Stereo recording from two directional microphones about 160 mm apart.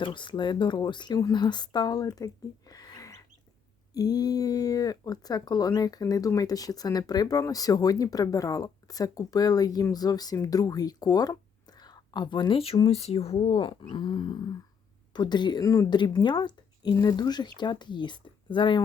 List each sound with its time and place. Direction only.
0.0 s speech: 30° left (ahead or behind)